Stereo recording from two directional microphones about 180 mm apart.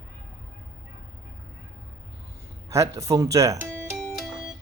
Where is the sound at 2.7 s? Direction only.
15° right (ahead or behind).